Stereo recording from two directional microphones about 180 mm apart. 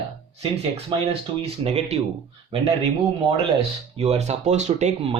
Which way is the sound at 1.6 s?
35° right (ahead or behind).